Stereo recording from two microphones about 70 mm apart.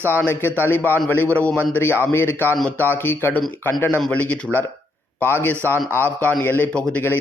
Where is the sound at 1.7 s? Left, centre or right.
Left.